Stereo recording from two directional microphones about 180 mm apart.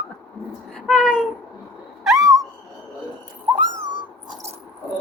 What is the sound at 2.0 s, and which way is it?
Owl, centre (ahead or behind).